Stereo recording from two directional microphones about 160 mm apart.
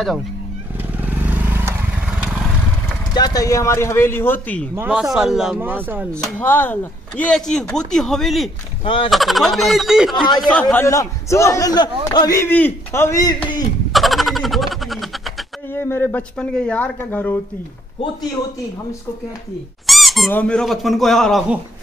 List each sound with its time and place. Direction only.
0.7 s vehicle: 10° right (ahead or behind)
3.2 s a man's voice: 25° left (ahead or behind)
4.7 s speech: 10° right (ahead or behind)
6.4 s a man's voice: 10° left (ahead or behind)
8.8 s speech: 30° left (ahead or behind)
9.1 s speech: centre (ahead or behind)
10.4 s a man's voice: 10° left (ahead or behind)
13.9 s chicken: centre (ahead or behind)
15.7 s a man's voice: 15° left (ahead or behind)
19.9 s squeak: centre (ahead or behind)
20.2 s speech: 10° left (ahead or behind)